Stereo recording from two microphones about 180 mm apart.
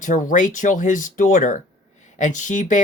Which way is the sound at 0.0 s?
45° left (ahead or behind).